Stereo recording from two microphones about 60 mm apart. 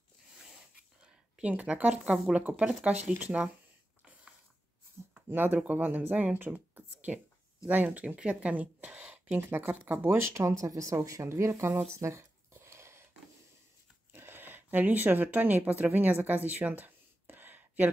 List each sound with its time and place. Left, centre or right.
0.5 s dog: centre
1.4 s speech: right
5.3 s speech: right
9.4 s speech: right
9.7 s speech: right
10.0 s speech: right
10.4 s a woman's voice: right
11.2 s speech: right
11.9 s a sound: right
14.1 s speech: right